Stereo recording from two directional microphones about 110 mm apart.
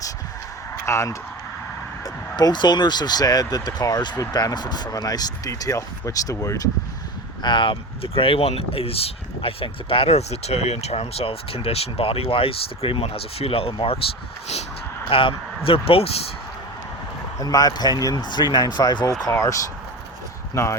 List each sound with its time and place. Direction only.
0.9 s speech: 25° left (ahead or behind)
2.0 s speech: 40° left (ahead or behind)
7.4 s speech: 45° left (ahead or behind)
15.1 s speech: 55° left (ahead or behind)
17.4 s speech: 35° left (ahead or behind)